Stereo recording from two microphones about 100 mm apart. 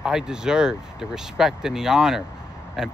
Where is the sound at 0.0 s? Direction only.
5° right (ahead or behind).